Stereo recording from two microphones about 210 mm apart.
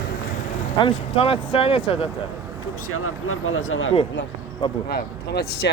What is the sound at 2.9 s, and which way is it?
Speech, 85° left.